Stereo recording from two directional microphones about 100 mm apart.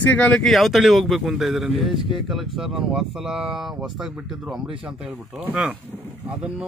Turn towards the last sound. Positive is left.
turn(degrees=-10)  # may be behind; listen again after turning